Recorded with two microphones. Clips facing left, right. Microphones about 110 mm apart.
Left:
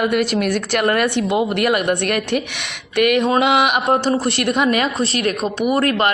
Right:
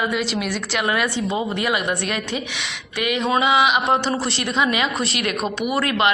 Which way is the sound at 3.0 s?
55° left (ahead or behind).